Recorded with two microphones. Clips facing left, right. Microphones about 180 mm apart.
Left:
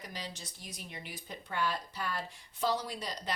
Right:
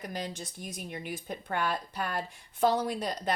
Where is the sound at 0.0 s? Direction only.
50° right (ahead or behind).